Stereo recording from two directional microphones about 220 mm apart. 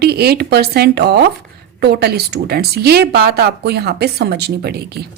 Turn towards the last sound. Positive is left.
turn(degrees=-45)  # may be behind; listen again after turning